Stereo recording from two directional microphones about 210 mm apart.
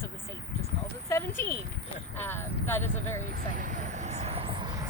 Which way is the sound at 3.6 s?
40° right (ahead or behind).